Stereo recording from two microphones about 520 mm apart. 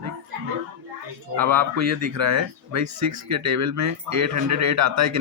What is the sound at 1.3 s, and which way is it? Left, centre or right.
A man's voice, right.